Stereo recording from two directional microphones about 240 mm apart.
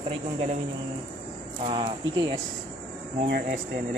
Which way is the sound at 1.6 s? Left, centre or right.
Centre.